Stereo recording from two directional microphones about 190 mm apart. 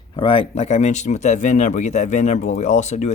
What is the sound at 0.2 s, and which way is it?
Speech, 30° left (ahead or behind).